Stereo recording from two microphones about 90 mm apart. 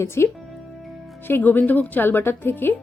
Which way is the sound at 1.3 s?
20° left (ahead or behind).